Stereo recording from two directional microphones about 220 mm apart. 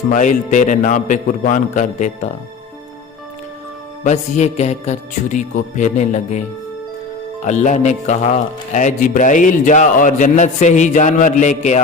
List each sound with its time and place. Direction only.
0.1 s speech: 35° left (ahead or behind)
4.0 s speech: 30° left (ahead or behind)
7.4 s speech: 35° left (ahead or behind)